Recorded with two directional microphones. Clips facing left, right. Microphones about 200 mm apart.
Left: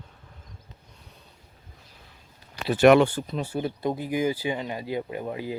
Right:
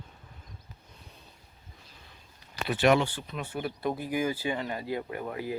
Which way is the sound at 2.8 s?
55° left (ahead or behind).